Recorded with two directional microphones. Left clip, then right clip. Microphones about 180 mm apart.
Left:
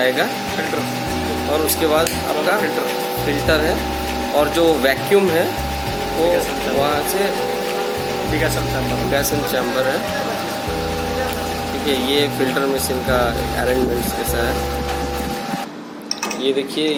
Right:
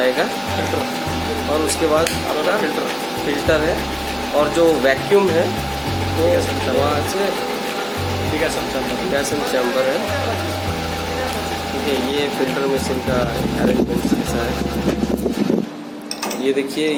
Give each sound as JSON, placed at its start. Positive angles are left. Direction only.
{"t": 4.4, "sound": "speech", "side_deg": 15}